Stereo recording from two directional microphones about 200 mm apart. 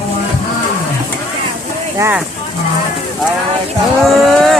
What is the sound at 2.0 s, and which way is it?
Speech, 10° right (ahead or behind).